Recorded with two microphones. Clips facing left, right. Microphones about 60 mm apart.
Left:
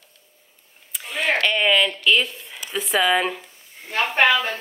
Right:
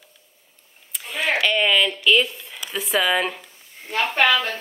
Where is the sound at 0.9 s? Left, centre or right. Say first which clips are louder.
Left 1 dB; centre.